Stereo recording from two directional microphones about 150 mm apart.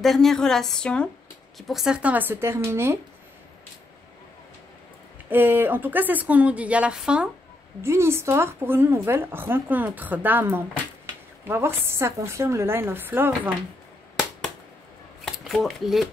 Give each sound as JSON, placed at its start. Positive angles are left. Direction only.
{"t": 0.0, "sound": "a woman's voice", "side_deg": 0}
{"t": 5.3, "sound": "a woman's voice", "side_deg": -15}
{"t": 7.8, "sound": "a woman's voice", "side_deg": -15}
{"t": 15.2, "sound": "speech", "side_deg": 0}